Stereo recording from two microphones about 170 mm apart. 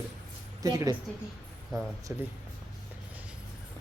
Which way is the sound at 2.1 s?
15° right (ahead or behind).